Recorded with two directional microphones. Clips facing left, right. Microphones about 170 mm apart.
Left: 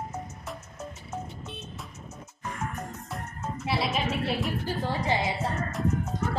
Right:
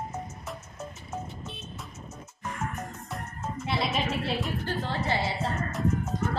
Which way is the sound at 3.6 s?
Centre (ahead or behind).